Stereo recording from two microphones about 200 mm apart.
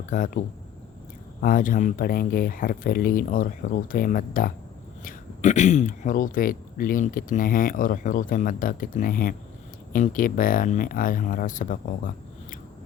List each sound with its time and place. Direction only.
0.1 s speech: 40° left (ahead or behind)